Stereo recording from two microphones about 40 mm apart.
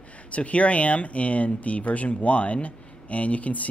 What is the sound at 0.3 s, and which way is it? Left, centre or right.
Speech, left.